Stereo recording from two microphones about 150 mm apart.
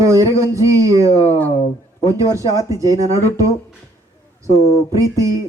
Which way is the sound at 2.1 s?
20° right (ahead or behind).